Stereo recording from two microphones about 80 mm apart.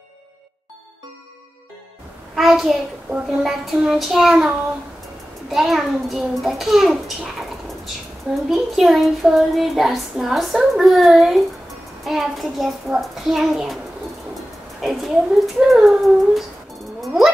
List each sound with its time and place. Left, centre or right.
2.3 s child singing: centre
14.8 s child singing: centre
17.0 s a sound: centre